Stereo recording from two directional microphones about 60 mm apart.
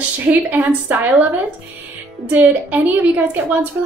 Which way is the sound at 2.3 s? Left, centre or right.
Right.